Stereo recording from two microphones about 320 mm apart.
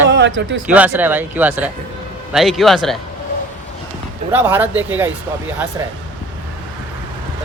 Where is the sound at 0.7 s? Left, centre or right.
Centre.